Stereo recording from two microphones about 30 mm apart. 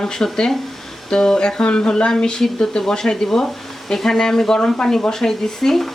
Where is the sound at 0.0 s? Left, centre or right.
Left.